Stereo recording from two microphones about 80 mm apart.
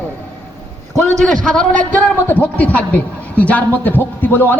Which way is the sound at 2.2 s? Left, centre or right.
Left.